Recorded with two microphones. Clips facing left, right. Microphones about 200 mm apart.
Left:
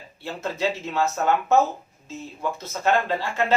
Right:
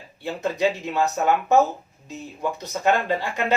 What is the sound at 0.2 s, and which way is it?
Speech, 15° right (ahead or behind).